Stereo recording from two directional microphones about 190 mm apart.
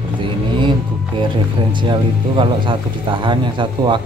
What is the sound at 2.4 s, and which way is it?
Speech, 25° right (ahead or behind).